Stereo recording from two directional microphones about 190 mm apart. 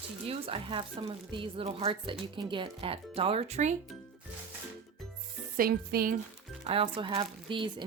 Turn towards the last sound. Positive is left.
turn(degrees=-25)  # may be behind; listen again after turning